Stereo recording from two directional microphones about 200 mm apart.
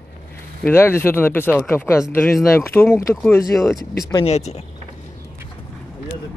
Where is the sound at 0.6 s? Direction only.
10° left (ahead or behind).